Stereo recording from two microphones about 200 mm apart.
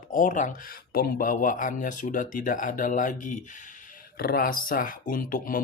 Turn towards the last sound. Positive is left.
turn(degrees=45)  # may be behind; listen again after turning